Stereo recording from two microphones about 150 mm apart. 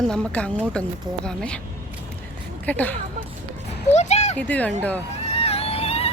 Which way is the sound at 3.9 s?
50° left (ahead or behind).